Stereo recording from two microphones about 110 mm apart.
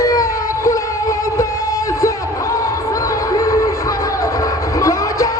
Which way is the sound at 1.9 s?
30° left (ahead or behind).